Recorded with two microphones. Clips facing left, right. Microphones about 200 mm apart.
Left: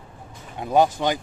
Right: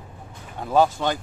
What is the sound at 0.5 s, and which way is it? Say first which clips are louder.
Speech: left 1 dB; 15° left (ahead or behind).